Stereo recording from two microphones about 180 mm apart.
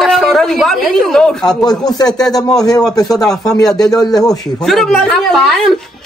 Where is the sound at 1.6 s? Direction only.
20° left (ahead or behind).